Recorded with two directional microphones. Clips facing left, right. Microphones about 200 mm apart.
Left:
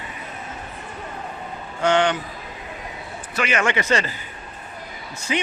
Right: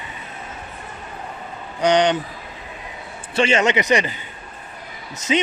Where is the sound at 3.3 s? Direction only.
25° right (ahead or behind).